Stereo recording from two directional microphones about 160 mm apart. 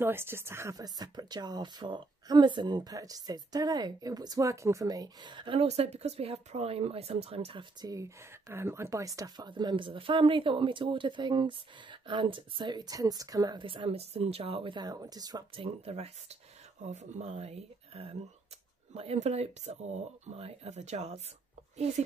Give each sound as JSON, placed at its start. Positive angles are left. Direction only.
{"t": 0.0, "sound": "a woman's voice", "side_deg": -15}
{"t": 7.8, "sound": "a woman's voice", "side_deg": -20}